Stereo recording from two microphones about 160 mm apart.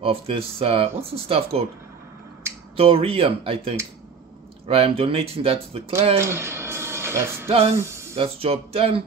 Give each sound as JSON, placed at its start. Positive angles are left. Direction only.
{"t": 0.0, "sound": "speech", "side_deg": -35}
{"t": 2.8, "sound": "speech", "side_deg": -35}
{"t": 6.1, "sound": "music", "side_deg": -15}
{"t": 7.4, "sound": "speech", "side_deg": -35}
{"t": 7.7, "sound": "speech", "side_deg": -15}
{"t": 8.2, "sound": "speech", "side_deg": -35}